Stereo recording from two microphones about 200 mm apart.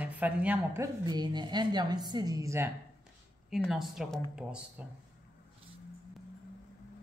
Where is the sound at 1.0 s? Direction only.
20° right (ahead or behind).